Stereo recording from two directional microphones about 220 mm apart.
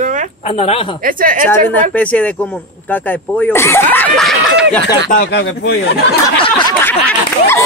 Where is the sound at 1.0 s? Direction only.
40° right (ahead or behind).